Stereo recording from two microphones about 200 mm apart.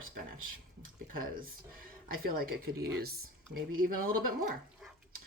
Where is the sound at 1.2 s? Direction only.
45° right (ahead or behind).